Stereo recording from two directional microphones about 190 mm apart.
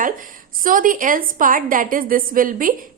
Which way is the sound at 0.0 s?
45° right (ahead or behind).